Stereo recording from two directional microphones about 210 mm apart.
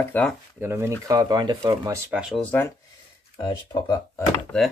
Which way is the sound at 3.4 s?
20° left (ahead or behind).